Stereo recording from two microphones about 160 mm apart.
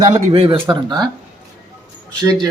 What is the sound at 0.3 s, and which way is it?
Speech, 35° right (ahead or behind).